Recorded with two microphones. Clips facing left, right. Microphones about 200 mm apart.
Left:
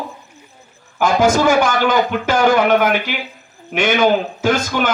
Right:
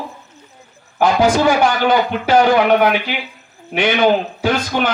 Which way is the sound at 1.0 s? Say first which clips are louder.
Even; 45° left (ahead or behind).